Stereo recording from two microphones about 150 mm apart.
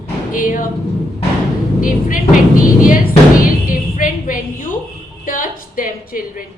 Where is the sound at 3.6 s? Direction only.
65° left (ahead or behind).